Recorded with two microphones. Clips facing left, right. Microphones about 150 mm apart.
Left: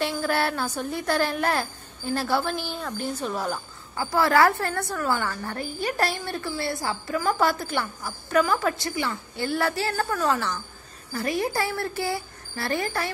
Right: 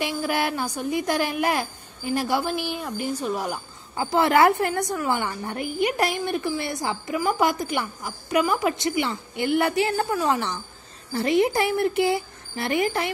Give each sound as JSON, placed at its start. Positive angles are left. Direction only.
{"t": 0.0, "sound": "a woman's voice", "side_deg": -15}